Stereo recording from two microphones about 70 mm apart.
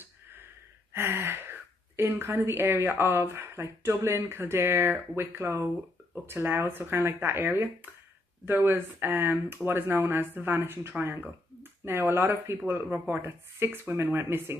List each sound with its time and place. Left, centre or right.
0.9 s speech: right